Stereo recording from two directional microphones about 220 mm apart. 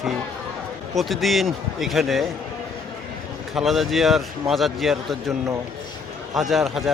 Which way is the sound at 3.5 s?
Centre (ahead or behind).